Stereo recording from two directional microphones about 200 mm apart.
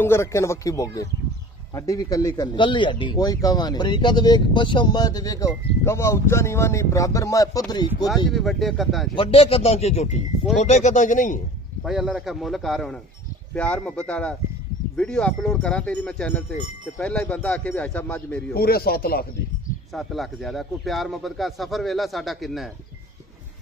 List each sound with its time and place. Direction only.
0.0 s a man's voice: 15° left (ahead or behind)
8.3 s a man's voice: centre (ahead or behind)
9.1 s speech: 25° left (ahead or behind)
11.8 s a man's voice: centre (ahead or behind)
18.5 s speech: 50° left (ahead or behind)
19.9 s a man's voice: centre (ahead or behind)